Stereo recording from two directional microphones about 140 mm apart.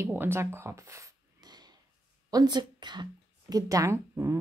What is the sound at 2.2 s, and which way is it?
Speech, 30° right (ahead or behind).